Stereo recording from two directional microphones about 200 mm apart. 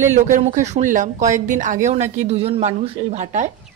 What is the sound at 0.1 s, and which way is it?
Speech, 35° right (ahead or behind).